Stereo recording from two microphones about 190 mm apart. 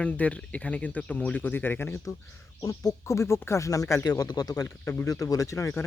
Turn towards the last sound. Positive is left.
turn(degrees=15)  # may be behind; listen again after turning